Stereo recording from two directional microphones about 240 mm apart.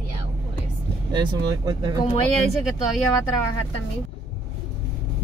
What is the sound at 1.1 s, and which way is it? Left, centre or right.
Speech, centre.